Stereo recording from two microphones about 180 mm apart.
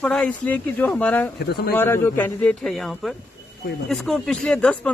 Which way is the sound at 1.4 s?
65° left (ahead or behind).